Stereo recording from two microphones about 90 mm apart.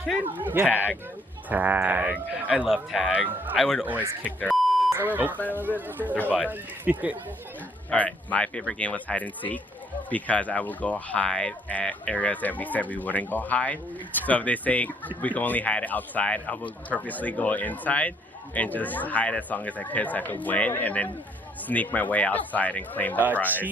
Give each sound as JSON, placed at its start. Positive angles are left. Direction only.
{"t": 0.3, "sound": "speech", "side_deg": -20}
{"t": 0.7, "sound": "speech", "side_deg": 20}
{"t": 1.5, "sound": "speech", "side_deg": -20}
{"t": 2.6, "sound": "speech", "side_deg": -5}
{"t": 4.2, "sound": "speech", "side_deg": 15}
{"t": 4.4, "sound": "beep", "side_deg": 0}
{"t": 4.9, "sound": "speech", "side_deg": -20}
{"t": 7.9, "sound": "speech", "side_deg": 15}